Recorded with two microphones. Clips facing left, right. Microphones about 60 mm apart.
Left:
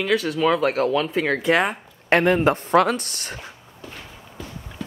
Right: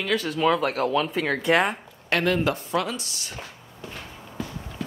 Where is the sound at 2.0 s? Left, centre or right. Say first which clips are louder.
Left 6 dB; left.